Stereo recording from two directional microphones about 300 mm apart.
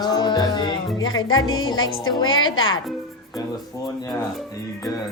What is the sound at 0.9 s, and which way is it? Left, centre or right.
Speech, left.